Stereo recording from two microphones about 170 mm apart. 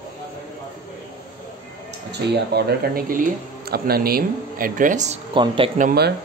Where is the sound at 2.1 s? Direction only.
70° right (ahead or behind); by 5.1 s 45° right (ahead or behind).